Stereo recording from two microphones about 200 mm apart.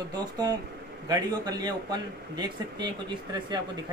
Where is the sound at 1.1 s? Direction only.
20° right (ahead or behind).